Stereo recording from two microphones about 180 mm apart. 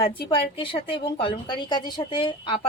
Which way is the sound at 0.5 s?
30° left (ahead or behind).